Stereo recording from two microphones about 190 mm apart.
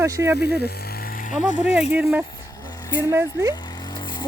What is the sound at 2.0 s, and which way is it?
Speech, 10° right (ahead or behind).